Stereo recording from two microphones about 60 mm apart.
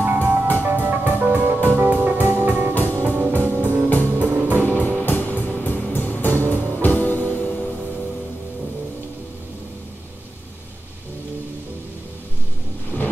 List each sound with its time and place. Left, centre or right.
0.0 s music: right
2.7 s music: left
3.0 s music: right
4.6 s music: left
12.9 s a sound: left